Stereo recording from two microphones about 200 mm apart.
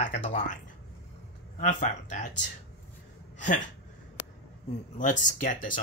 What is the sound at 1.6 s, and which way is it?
Speech, 35° left (ahead or behind).